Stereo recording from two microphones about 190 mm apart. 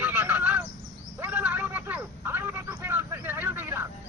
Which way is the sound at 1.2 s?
10° right (ahead or behind).